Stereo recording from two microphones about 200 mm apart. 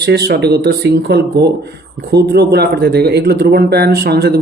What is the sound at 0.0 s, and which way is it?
Speech, 55° right (ahead or behind).